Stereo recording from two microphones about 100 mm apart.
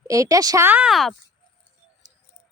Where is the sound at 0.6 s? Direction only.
20° right (ahead or behind).